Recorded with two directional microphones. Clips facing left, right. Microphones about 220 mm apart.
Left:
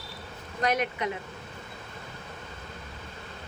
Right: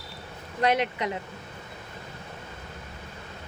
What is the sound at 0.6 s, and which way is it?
Speech, 30° right (ahead or behind).